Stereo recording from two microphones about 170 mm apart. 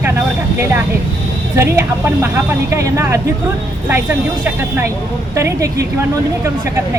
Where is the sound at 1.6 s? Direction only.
15° right (ahead or behind).